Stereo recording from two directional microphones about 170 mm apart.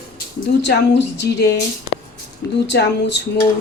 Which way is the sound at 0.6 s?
85° left.